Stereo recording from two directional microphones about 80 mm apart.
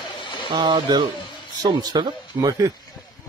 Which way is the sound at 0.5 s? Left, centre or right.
Right.